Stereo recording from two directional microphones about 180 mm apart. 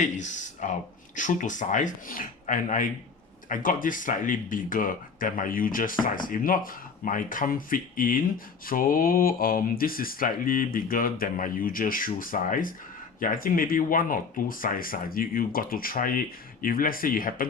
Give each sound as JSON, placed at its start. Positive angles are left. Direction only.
{"t": 0.0, "sound": "speech", "side_deg": 40}